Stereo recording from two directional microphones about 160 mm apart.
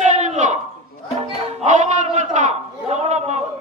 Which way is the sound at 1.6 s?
45° right (ahead or behind).